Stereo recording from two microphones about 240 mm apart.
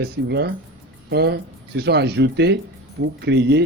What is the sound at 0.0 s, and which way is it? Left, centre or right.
Speech, right.